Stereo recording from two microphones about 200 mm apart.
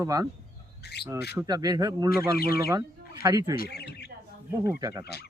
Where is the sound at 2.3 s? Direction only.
50° left (ahead or behind).